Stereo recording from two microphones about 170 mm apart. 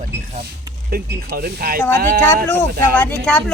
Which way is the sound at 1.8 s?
15° left (ahead or behind).